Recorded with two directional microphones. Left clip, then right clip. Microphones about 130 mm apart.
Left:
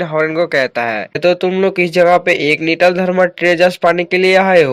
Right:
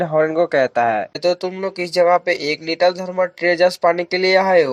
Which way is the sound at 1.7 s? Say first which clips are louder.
Left 3 dB; 50° left (ahead or behind).